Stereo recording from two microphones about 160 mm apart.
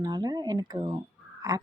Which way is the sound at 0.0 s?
25° right (ahead or behind).